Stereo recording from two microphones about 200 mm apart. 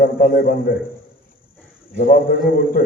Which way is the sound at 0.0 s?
45° left (ahead or behind).